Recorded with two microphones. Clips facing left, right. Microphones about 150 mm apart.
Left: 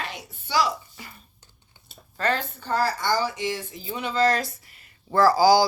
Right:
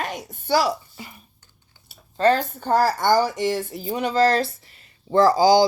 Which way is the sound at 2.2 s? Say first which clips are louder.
Right 7 dB; 30° right (ahead or behind).